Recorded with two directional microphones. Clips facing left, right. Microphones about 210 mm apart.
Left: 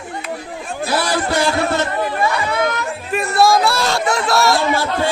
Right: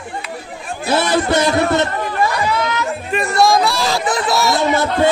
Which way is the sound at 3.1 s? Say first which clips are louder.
Even; centre (ahead or behind).